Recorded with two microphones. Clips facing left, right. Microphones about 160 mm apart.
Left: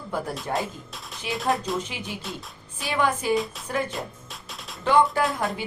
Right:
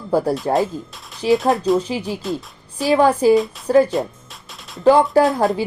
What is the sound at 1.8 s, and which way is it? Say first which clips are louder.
A woman's voice: right 10 dB; 35° right (ahead or behind).